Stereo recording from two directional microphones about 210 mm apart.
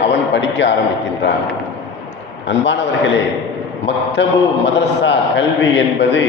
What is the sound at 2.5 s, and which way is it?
A man's voice, 60° left (ahead or behind).